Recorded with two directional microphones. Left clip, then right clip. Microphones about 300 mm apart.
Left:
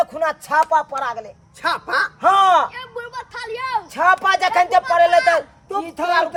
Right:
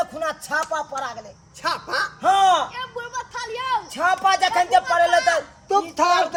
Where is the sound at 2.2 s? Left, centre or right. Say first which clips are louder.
Left 3 dB; centre.